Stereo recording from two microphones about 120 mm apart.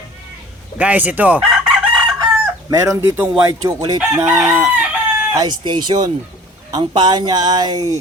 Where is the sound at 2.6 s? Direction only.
30° right (ahead or behind).